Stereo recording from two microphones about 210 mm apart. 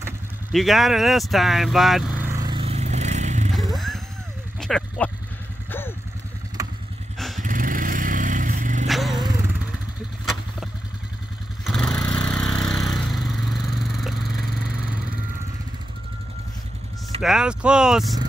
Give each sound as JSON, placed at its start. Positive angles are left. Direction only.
{"t": 0.5, "sound": "vehicle", "side_deg": 0}
{"t": 3.5, "sound": "vehicle", "side_deg": 0}
{"t": 4.6, "sound": "speech", "side_deg": 0}
{"t": 5.7, "sound": "vehicle", "side_deg": 10}
{"t": 7.2, "sound": "vehicle", "side_deg": 0}
{"t": 7.4, "sound": "dog", "side_deg": -40}
{"t": 8.8, "sound": "vehicle", "side_deg": 0}
{"t": 11.6, "sound": "vehicle", "side_deg": 0}
{"t": 17.2, "sound": "speech", "side_deg": 0}